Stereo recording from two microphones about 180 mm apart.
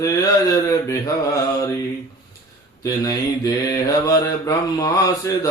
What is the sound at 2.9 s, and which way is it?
Mantra, 20° left (ahead or behind).